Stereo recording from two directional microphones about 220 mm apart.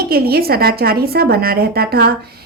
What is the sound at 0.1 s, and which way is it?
A woman's voice, 45° right (ahead or behind).